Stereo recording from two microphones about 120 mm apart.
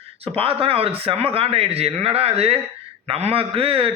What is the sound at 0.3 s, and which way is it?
A man's voice, 50° right (ahead or behind).